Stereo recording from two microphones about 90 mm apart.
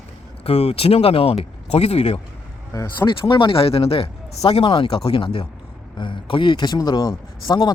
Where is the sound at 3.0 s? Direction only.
60° left (ahead or behind); by 5.2 s 90° left.